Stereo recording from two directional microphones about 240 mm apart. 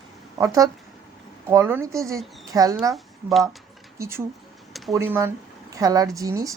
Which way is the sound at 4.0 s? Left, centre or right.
Centre.